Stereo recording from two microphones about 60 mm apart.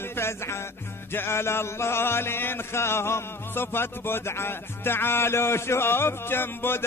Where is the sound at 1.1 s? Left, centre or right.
Left.